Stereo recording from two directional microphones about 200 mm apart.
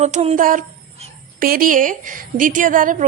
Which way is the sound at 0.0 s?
35° right (ahead or behind).